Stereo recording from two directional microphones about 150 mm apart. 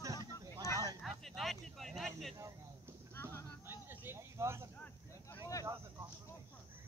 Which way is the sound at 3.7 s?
15° right (ahead or behind).